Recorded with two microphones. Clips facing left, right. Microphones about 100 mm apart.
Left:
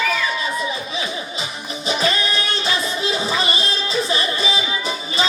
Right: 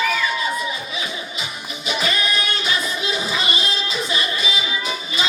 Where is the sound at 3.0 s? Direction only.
35° left (ahead or behind).